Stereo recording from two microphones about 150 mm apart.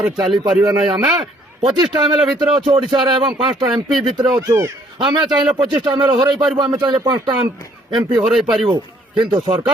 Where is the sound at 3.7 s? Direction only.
Centre (ahead or behind).